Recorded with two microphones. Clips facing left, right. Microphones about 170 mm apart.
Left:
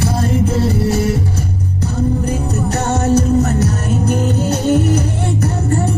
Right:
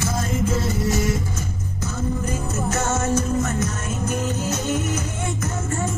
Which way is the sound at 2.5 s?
35° left (ahead or behind).